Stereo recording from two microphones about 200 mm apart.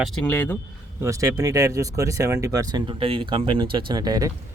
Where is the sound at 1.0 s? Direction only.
15° right (ahead or behind).